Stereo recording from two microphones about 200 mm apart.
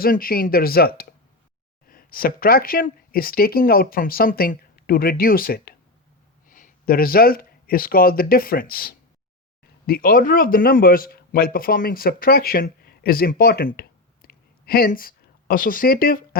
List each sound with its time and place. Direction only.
0.0 s speech: 45° left (ahead or behind)